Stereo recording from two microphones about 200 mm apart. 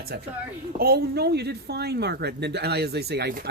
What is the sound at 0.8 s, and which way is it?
Speech, 50° right (ahead or behind).